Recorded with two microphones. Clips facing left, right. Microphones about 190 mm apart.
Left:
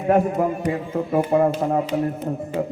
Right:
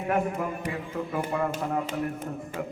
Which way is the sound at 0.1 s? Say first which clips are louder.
Left 9 dB; 35° left (ahead or behind).